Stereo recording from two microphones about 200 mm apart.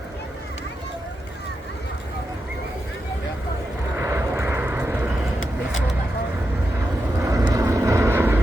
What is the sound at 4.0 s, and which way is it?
Vehicle, 15° right (ahead or behind).